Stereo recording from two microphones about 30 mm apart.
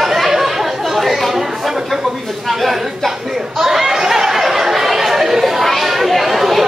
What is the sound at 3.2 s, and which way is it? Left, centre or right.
Chatter, centre.